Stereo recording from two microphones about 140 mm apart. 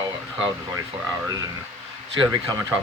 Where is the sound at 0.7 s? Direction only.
25° right (ahead or behind).